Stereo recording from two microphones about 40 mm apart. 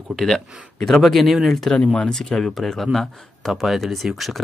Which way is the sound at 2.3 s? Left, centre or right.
Centre.